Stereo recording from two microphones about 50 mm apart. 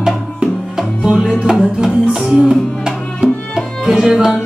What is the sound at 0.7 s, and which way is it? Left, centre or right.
Music, centre.